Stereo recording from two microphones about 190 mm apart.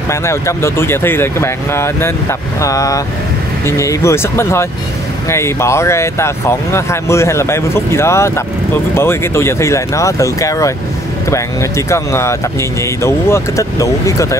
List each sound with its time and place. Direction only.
0.1 s speech: 15° left (ahead or behind)